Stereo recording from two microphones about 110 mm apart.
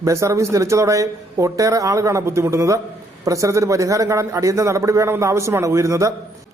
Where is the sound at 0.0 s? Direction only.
25° right (ahead or behind).